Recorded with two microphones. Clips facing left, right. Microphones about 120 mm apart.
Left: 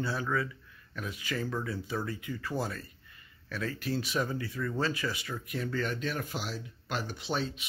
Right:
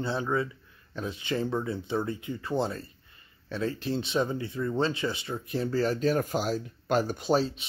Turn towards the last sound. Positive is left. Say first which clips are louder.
# right 8 dB
turn(degrees=-35)  # may be behind; listen again after turning